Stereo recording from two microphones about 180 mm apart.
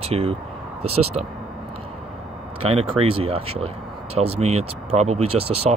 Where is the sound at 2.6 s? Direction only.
30° right (ahead or behind).